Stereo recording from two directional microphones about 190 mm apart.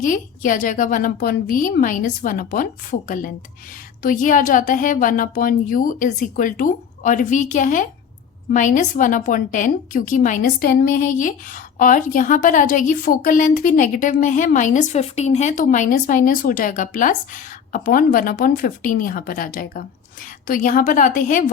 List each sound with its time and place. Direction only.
0.0 s a woman's voice: 45° left (ahead or behind)